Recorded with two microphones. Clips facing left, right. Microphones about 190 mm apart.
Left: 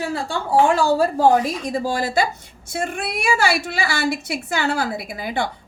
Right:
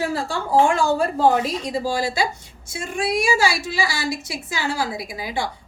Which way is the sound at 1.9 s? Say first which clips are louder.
Left 3 dB; 50° left (ahead or behind).